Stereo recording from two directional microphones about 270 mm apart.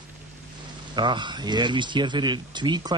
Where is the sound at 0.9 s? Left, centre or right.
Centre.